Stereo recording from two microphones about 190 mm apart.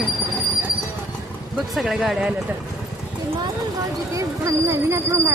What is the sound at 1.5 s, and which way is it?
Speech, centre (ahead or behind).